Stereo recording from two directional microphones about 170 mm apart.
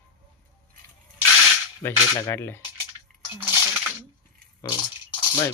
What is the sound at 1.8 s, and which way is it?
Cutlery, 15° left (ahead or behind).